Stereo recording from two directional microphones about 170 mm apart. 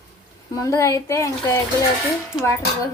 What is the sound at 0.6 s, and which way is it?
Speech, 20° left (ahead or behind).